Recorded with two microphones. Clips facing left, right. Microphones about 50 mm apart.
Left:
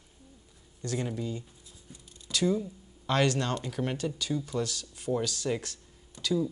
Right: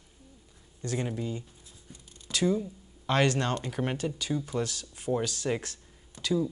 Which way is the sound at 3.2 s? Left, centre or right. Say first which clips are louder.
Right 1 dB; right.